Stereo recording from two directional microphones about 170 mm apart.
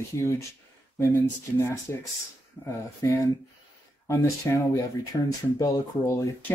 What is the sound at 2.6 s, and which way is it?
Speech, 15° left (ahead or behind).